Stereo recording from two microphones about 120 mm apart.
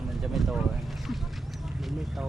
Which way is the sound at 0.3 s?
Centre (ahead or behind).